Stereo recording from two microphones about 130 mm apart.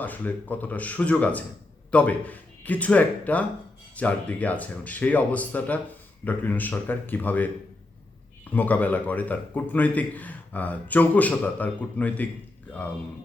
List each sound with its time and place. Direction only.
0.0 s a man's voice: 15° left (ahead or behind)
8.5 s a man's voice: 15° left (ahead or behind)